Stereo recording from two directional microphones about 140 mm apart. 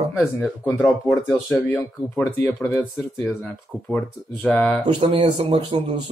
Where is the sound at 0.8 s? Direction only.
Centre (ahead or behind).